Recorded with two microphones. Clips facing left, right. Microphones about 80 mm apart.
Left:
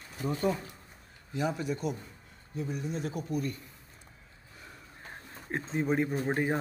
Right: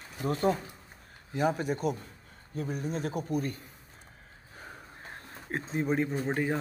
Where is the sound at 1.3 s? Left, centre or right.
Right.